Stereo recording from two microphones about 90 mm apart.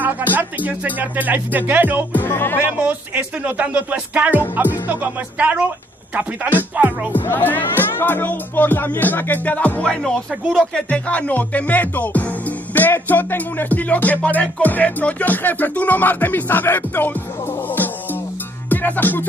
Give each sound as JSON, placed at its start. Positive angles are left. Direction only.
{"t": 0.0, "sound": "speech", "side_deg": -20}
{"t": 2.1, "sound": "speech", "side_deg": 25}
{"t": 2.8, "sound": "speech", "side_deg": -15}
{"t": 6.8, "sound": "speech", "side_deg": -15}
{"t": 7.1, "sound": "speech", "side_deg": 20}
{"t": 18.7, "sound": "music", "side_deg": 20}